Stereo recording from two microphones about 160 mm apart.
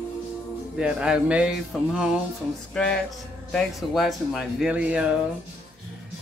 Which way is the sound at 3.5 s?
Centre (ahead or behind).